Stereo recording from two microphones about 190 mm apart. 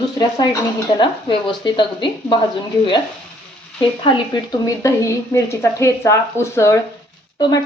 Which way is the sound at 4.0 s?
25° left (ahead or behind).